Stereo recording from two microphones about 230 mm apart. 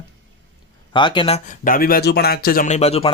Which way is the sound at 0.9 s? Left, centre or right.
Left.